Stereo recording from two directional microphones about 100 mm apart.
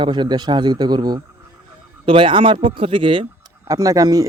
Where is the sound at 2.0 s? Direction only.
55° right (ahead or behind).